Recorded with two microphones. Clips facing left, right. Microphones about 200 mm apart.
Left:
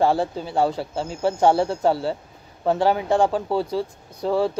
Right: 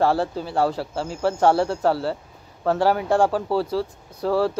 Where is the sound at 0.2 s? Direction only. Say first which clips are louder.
Even; 5° right (ahead or behind).